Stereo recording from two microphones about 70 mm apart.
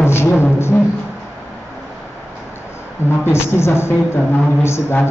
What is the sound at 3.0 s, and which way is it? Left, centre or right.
A man's voice, left.